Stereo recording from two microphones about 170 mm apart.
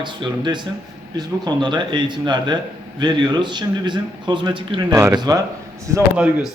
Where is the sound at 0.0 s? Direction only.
25° right (ahead or behind).